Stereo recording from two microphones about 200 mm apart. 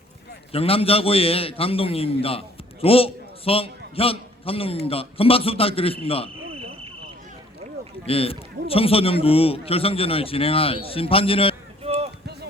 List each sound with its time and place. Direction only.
0.5 s a man's voice: 30° left (ahead or behind)
8.0 s a man's voice: 30° left (ahead or behind)
11.8 s a sound: 30° right (ahead or behind)